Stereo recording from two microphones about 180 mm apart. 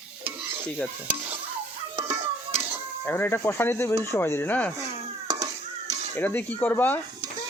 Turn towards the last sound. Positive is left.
turn(degrees=10)  # may be behind; listen again after turning